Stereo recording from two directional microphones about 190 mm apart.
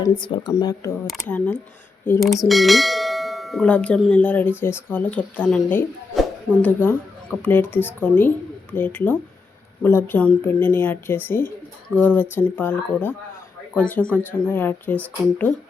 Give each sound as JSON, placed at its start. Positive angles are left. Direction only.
{"t": 0.0, "sound": "a woman's voice", "side_deg": 20}
{"t": 1.1, "sound": "bell", "side_deg": 10}